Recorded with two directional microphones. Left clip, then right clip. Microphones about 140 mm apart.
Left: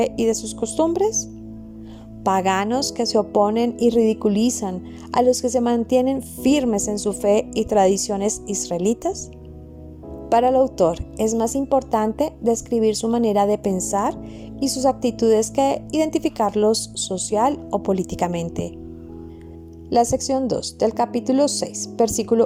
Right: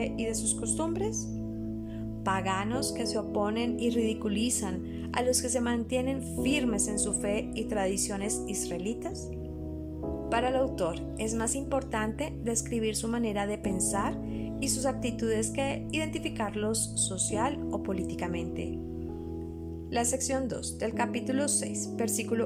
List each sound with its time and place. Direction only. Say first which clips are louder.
0.0 s a woman's voice: left 13 dB; 55° left (ahead or behind)
2.2 s a woman's voice: left 11 dB; 60° left (ahead or behind)
10.2 s a woman's voice: left 12 dB; 50° left (ahead or behind)
14.6 s a woman's voice: left 12 dB; 40° left (ahead or behind)
19.9 s a woman's voice: left 12 dB; 40° left (ahead or behind)